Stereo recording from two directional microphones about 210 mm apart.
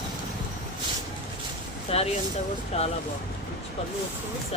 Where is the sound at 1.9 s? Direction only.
30° left (ahead or behind).